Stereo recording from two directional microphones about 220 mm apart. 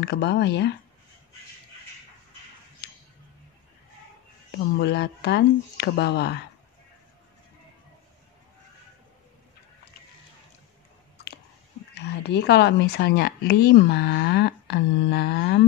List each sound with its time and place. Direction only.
0.0 s speech: 50° left (ahead or behind)
2.8 s a sound: 50° left (ahead or behind)
4.7 s speech: 50° left (ahead or behind)
11.9 s speech: 50° left (ahead or behind)